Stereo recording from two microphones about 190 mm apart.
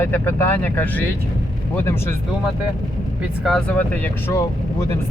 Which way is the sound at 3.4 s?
5° left (ahead or behind).